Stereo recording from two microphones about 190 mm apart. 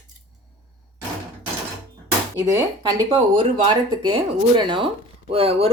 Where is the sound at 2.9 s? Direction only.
25° right (ahead or behind).